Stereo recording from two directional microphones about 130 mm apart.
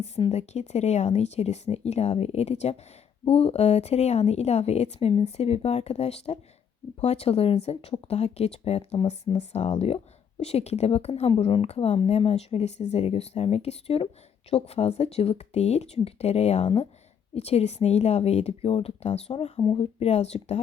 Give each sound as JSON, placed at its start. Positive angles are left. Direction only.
{"t": 0.3, "sound": "a woman's voice", "side_deg": 60}
{"t": 19.6, "sound": "speech", "side_deg": 45}